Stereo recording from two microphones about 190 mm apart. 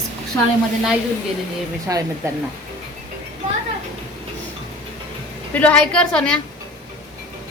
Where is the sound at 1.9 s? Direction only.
20° right (ahead or behind).